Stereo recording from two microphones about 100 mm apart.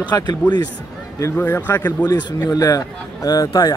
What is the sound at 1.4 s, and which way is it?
Speech, 20° left (ahead or behind).